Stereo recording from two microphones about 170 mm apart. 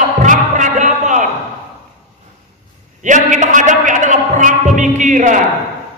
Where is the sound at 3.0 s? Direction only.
45° right (ahead or behind).